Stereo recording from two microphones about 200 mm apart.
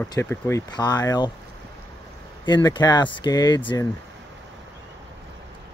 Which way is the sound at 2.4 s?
20° left (ahead or behind).